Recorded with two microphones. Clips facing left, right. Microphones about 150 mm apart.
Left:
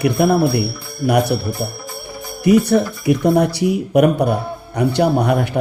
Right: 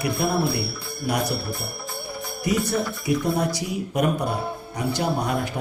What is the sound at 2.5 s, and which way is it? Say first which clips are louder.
Speech: left 11 dB; 65° left (ahead or behind).